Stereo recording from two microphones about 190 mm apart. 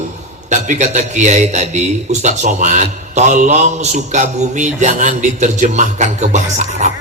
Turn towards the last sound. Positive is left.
turn(degrees=-40)  # may be behind; listen again after turning